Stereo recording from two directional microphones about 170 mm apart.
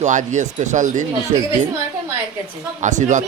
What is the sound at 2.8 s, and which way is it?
Speech, 45° right (ahead or behind).